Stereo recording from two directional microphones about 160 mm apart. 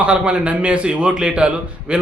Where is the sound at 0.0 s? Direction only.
5° right (ahead or behind).